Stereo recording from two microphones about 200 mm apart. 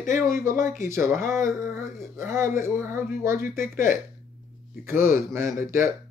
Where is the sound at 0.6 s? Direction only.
40° left (ahead or behind).